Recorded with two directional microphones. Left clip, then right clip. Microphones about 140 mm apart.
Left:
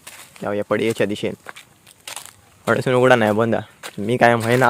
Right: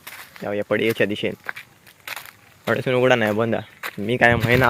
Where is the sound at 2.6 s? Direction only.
30° left (ahead or behind).